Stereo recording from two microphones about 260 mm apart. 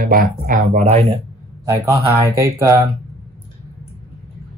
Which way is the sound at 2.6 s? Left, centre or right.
Centre.